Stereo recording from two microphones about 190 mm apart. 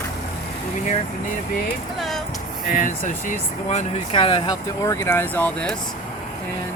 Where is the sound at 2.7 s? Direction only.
45° left (ahead or behind); by 5.7 s 10° left (ahead or behind).